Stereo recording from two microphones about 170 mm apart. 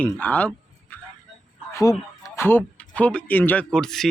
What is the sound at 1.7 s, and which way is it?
Speech, 20° left (ahead or behind).